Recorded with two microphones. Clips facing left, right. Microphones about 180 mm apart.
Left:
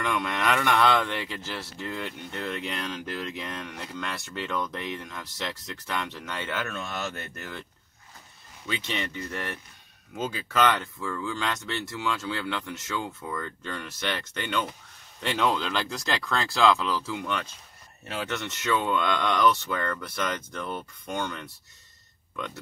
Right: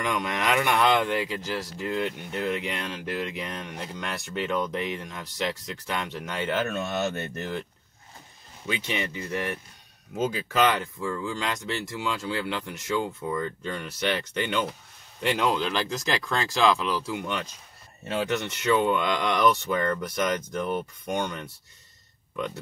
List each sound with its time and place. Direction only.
0.0 s speech: 15° right (ahead or behind)
8.6 s speech: 10° right (ahead or behind)